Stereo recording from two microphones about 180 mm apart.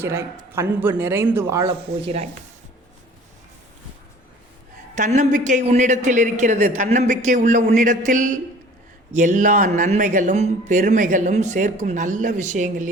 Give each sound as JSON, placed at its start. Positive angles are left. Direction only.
{"t": 0.0, "sound": "a man's voice", "side_deg": -15}
{"t": 4.9, "sound": "a man's voice", "side_deg": -45}